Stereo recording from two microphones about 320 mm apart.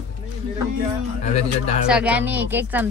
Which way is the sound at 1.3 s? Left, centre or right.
Left.